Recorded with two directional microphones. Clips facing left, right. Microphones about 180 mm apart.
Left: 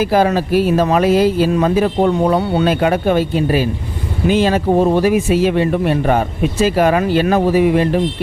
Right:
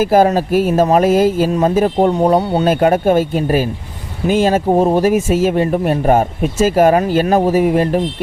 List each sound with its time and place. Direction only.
0.0 s speech: 45° right (ahead or behind)